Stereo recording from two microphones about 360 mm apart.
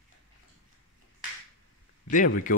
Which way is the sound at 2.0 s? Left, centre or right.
Left.